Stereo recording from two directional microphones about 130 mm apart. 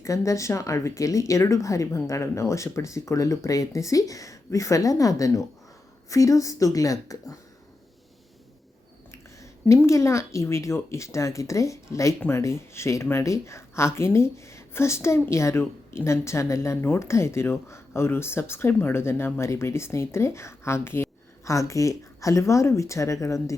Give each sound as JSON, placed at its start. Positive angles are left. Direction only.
{"t": 0.3, "sound": "speech", "side_deg": 25}
{"t": 9.1, "sound": "speech", "side_deg": 20}